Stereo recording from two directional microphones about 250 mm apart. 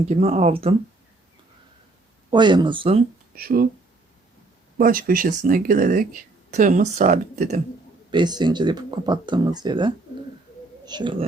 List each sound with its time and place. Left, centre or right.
0.0 s speech: right
2.3 s speech: centre
3.3 s speech: right
4.8 s speech: right
8.1 s speech: centre